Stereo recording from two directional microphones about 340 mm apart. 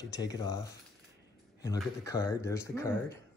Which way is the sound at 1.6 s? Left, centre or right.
Centre.